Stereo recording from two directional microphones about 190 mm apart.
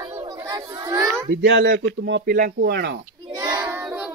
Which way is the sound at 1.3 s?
70° right (ahead or behind).